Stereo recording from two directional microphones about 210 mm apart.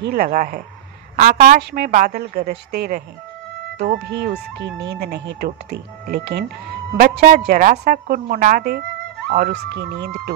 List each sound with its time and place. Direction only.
0.0 s speech: 45° right (ahead or behind)
1.6 s speech: 55° right (ahead or behind)
1.9 s a woman's voice: 40° right (ahead or behind)